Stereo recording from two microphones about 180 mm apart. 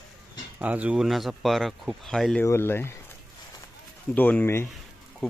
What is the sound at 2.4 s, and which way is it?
Speech, 15° left (ahead or behind).